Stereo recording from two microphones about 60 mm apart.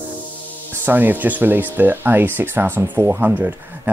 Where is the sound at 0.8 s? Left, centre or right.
Right.